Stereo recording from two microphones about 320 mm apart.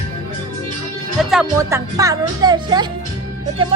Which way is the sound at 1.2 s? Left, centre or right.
Centre.